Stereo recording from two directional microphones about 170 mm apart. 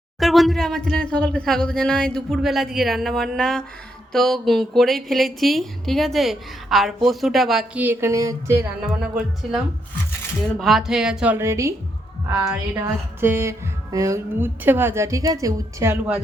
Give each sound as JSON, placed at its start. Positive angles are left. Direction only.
{"t": 0.2, "sound": "a woman's voice", "side_deg": 0}
{"t": 10.6, "sound": "a woman's voice", "side_deg": 0}
{"t": 13.1, "sound": "speech", "side_deg": -15}